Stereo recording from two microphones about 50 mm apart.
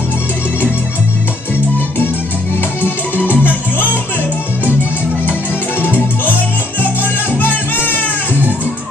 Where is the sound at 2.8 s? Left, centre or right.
Left.